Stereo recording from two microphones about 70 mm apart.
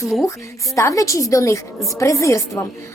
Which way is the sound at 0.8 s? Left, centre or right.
Left.